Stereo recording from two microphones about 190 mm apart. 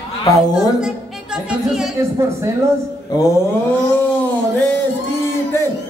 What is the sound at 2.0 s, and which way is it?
Speech, 15° right (ahead or behind).